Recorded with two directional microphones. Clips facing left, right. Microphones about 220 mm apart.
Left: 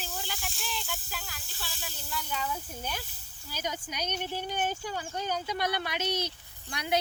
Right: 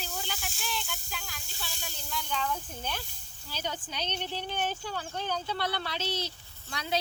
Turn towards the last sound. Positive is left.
turn(degrees=15)  # may be behind; listen again after turning